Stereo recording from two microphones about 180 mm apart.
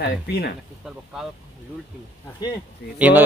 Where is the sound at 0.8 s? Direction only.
5° right (ahead or behind).